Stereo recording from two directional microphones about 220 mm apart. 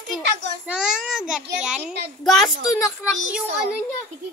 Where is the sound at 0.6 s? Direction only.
5° right (ahead or behind).